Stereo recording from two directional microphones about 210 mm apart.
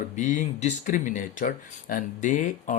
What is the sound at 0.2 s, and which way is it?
Speech, 35° left (ahead or behind).